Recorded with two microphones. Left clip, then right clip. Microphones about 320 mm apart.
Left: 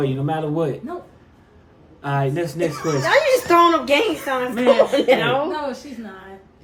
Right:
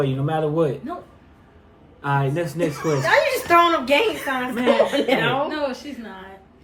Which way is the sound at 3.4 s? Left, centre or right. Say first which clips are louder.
Left 2 dB; left.